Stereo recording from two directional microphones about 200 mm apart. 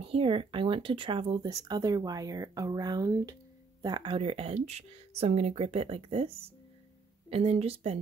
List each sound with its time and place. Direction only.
0.1 s speech: 25° right (ahead or behind)